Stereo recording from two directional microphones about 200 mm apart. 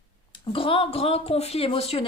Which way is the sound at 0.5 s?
25° left (ahead or behind).